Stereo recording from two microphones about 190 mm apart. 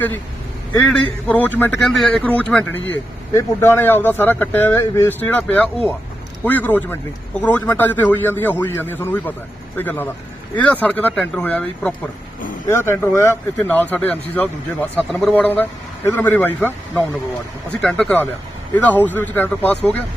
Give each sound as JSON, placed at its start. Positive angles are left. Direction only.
{"t": 0.8, "sound": "speech", "side_deg": 5}